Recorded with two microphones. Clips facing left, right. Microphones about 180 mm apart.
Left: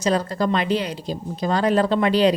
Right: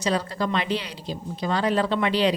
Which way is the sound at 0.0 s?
45° left (ahead or behind).